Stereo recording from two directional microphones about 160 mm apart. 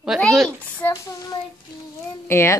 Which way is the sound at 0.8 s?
20° left (ahead or behind).